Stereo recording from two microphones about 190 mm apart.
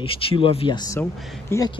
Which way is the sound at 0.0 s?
30° left (ahead or behind).